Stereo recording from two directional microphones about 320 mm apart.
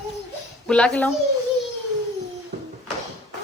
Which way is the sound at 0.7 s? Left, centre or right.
Centre.